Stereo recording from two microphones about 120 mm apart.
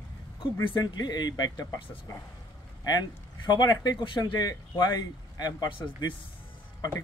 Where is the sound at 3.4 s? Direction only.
35° left (ahead or behind).